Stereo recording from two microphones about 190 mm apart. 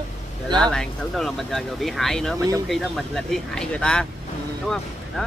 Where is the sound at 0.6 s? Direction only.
5° left (ahead or behind).